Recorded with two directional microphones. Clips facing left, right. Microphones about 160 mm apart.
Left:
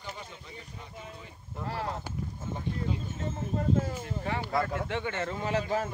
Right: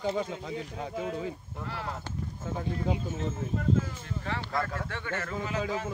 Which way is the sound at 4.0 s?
15° left (ahead or behind).